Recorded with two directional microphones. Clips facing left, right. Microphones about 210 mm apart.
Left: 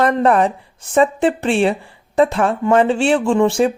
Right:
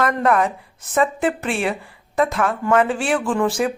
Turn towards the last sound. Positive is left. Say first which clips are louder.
# left 5 dB
turn(degrees=25)  # may be behind; listen again after turning